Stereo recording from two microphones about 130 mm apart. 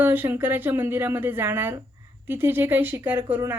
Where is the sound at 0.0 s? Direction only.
15° right (ahead or behind).